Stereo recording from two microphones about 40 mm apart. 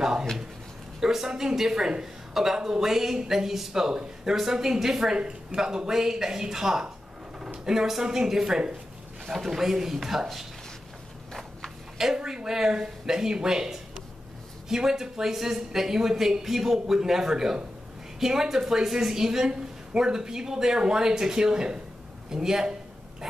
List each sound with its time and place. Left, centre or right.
0.0 s a sound: centre
1.0 s speech: centre
5.1 s a woman's voice: right
5.6 s speech: centre
12.2 s speech: centre